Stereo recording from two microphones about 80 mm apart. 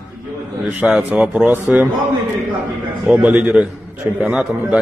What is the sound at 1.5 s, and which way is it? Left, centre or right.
Speech, right.